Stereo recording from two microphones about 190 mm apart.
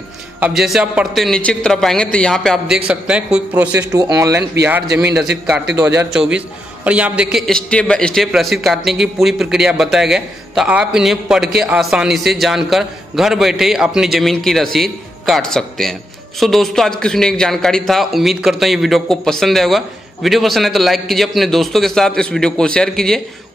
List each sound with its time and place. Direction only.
0.4 s a man's voice: centre (ahead or behind)
5.8 s a man's voice: 5° right (ahead or behind)